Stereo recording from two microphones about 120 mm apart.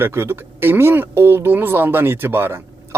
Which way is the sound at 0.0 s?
20° right (ahead or behind).